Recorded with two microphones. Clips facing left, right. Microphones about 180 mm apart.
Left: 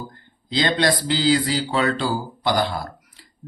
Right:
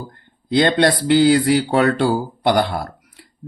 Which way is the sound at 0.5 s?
60° right (ahead or behind).